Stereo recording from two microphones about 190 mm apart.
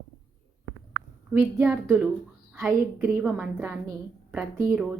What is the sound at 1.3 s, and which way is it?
A woman's voice, 10° right (ahead or behind).